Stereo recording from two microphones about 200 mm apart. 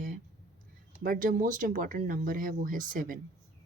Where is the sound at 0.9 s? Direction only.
45° right (ahead or behind).